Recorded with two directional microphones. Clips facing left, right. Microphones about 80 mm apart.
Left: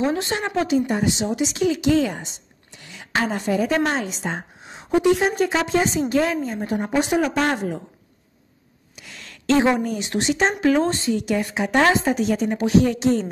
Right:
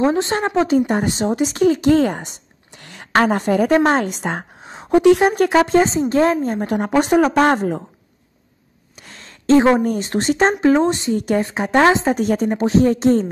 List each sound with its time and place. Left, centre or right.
0.0 s a woman's voice: right
0.7 s speech: right
4.6 s a sound: right
5.0 s speech: right
5.8 s a woman's voice: right
7.0 s speech: right
8.9 s a sound: right
9.7 s a woman's voice: right
11.1 s a woman's voice: right